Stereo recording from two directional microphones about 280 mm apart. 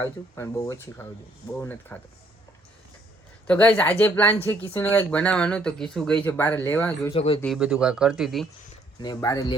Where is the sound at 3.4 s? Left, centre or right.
Centre.